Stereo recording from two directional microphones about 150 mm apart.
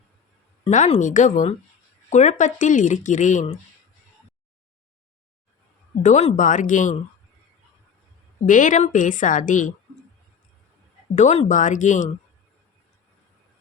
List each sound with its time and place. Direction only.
0.7 s speech: 55° left (ahead or behind)
6.0 s speech: 50° left (ahead or behind)
8.4 s speech: 60° left (ahead or behind)
11.1 s speech: 50° left (ahead or behind)